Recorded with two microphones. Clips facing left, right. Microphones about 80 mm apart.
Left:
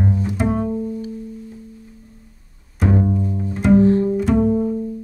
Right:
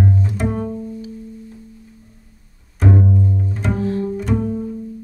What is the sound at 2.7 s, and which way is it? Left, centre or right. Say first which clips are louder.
Bowed string instrument: right 1 dB; centre.